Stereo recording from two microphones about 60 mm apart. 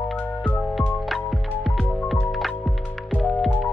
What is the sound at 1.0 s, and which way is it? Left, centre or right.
Music, centre.